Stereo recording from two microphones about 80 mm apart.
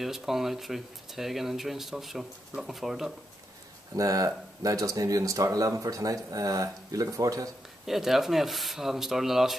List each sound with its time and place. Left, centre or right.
0.0 s speech: centre
3.9 s speech: right
7.8 s speech: centre